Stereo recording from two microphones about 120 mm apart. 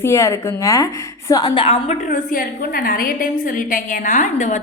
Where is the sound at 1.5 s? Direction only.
50° left (ahead or behind).